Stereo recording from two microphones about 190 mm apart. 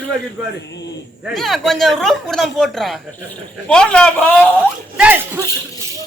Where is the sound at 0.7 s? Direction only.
65° left (ahead or behind).